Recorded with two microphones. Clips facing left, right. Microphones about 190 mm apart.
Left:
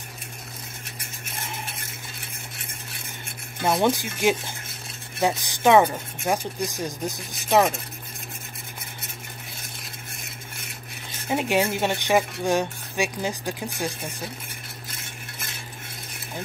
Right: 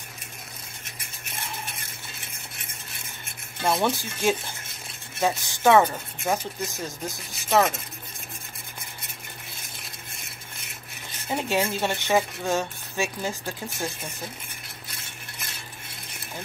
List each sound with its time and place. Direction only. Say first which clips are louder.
3.6 s speech: left 3 dB; 15° left (ahead or behind)
11.2 s speech: left 3 dB; 15° left (ahead or behind)